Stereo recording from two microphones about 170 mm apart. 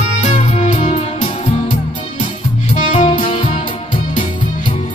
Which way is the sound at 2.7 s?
45° left (ahead or behind).